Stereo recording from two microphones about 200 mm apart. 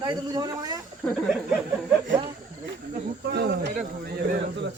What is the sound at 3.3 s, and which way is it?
Speech, 55° right (ahead or behind).